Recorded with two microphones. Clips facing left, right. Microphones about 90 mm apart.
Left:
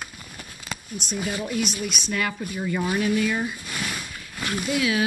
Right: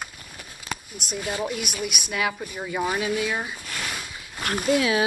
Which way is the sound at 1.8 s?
10° right (ahead or behind).